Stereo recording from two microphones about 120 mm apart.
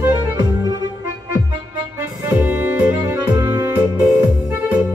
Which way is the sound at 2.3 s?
15° right (ahead or behind).